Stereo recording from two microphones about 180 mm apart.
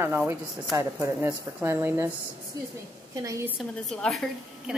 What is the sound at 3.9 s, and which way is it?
Speech, centre (ahead or behind).